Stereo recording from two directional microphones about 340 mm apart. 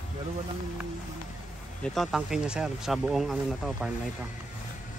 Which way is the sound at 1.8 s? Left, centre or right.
Centre.